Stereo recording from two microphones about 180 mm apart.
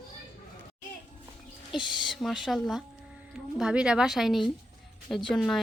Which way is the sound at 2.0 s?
Centre (ahead or behind).